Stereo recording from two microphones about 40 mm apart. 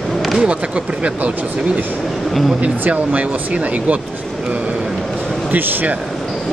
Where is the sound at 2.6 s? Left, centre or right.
Right.